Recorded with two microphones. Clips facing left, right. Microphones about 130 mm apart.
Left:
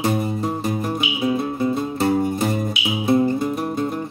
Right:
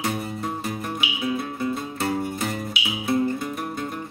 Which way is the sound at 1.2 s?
25° left (ahead or behind).